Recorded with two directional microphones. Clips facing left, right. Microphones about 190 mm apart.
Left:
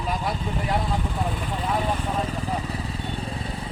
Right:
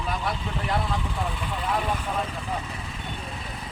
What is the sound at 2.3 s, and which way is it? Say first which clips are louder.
Vehicle: left 4 dB; 35° left (ahead or behind).